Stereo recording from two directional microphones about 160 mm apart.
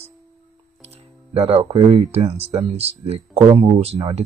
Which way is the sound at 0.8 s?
40° right (ahead or behind).